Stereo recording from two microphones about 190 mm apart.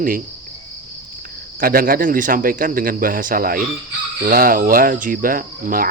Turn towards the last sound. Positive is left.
turn(degrees=-50)  # may be behind; listen again after turning